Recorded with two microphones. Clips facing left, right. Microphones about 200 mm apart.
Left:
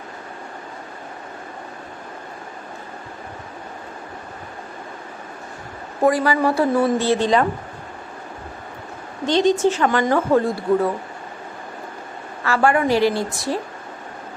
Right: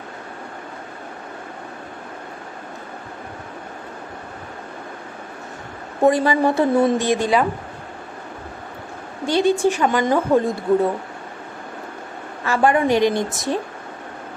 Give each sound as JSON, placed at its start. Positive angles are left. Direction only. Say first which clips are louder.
{"t": 6.0, "sound": "a woman's voice", "louder": "right 1 dB", "side_deg": -25}
{"t": 9.2, "sound": "a woman's voice", "louder": "even", "side_deg": -10}
{"t": 12.5, "sound": "a woman's voice", "louder": "right 1 dB", "side_deg": -20}